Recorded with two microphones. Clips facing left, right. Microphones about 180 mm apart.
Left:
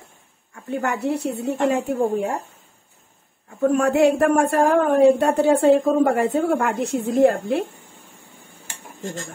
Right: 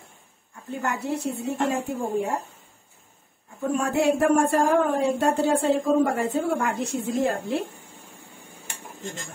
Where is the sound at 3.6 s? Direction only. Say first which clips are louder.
Left 7 dB; 65° left (ahead or behind).